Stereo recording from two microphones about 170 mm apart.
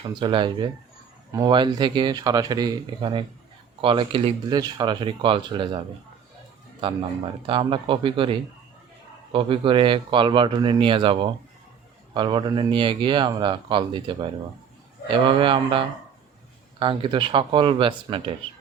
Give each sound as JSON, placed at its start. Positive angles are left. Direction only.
{"t": 0.2, "sound": "speech", "side_deg": -30}
{"t": 4.4, "sound": "speech", "side_deg": -25}
{"t": 7.4, "sound": "speech", "side_deg": -30}